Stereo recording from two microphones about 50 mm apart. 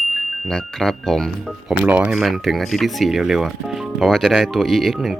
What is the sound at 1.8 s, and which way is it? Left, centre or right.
Speech, right.